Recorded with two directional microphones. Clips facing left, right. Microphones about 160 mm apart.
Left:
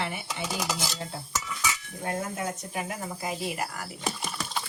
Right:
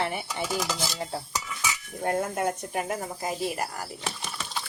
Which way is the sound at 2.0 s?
55° right (ahead or behind).